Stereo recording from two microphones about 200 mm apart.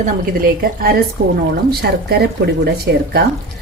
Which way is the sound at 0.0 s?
45° right (ahead or behind).